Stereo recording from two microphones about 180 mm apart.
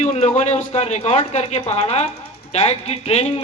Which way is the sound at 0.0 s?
35° left (ahead or behind).